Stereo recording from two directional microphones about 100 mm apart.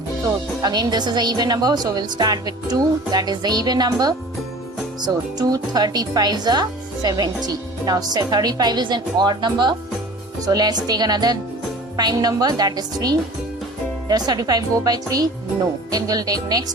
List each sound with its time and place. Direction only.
0.6 s a woman's voice: 45° right (ahead or behind)